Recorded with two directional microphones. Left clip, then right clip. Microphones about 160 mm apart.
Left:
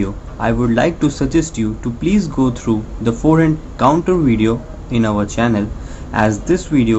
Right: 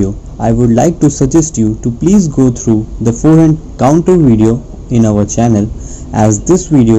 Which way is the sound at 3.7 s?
5° right (ahead or behind).